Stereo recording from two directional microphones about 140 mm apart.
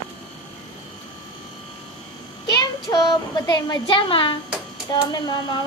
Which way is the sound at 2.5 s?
25° left (ahead or behind).